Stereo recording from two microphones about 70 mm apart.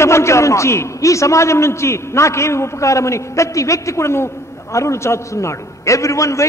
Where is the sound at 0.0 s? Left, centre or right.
Left.